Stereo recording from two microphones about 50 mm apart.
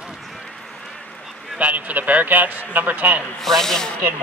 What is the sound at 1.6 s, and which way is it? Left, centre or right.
A man's voice, right.